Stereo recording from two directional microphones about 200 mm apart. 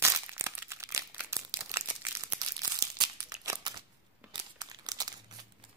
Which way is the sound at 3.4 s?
15° right (ahead or behind).